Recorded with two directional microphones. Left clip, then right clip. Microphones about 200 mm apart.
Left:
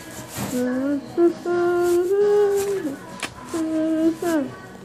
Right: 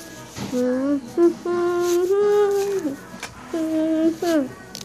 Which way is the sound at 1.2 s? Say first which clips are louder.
Right 1 dB; 25° right (ahead or behind).